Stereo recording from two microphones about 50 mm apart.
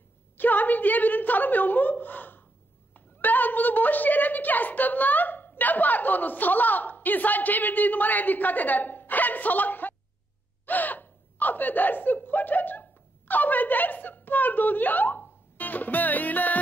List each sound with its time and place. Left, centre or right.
0.4 s a woman's voice: left
10.6 s gasp: left
13.3 s speech: left